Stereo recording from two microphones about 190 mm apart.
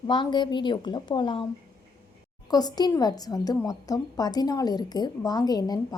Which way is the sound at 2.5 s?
20° left (ahead or behind).